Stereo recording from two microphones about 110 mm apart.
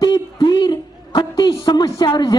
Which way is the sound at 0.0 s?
40° left (ahead or behind).